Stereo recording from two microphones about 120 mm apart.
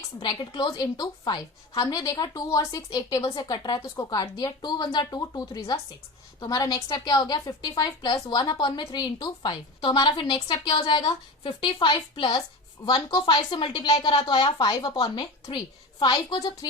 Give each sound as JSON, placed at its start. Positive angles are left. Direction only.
{"t": 0.2, "sound": "a woman's voice", "side_deg": 40}